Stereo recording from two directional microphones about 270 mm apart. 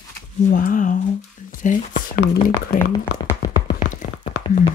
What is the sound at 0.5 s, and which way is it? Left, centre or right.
Speech, left.